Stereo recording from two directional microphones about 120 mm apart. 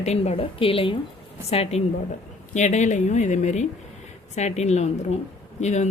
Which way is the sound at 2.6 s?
75° left (ahead or behind).